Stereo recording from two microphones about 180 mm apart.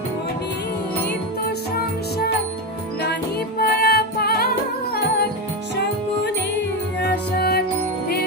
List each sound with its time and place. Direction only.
3.6 s music: 60° left (ahead or behind)
7.0 s music: 60° left (ahead or behind)